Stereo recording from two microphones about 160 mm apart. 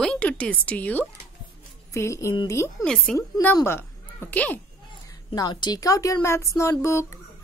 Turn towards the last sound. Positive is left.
turn(degrees=15)  # may be behind; listen again after turning